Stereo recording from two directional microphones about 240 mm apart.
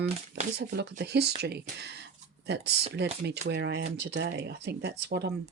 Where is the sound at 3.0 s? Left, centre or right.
Right.